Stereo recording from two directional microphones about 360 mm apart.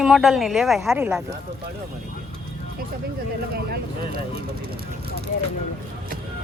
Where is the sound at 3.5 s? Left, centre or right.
Right.